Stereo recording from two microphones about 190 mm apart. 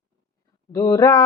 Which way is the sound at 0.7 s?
20° left (ahead or behind).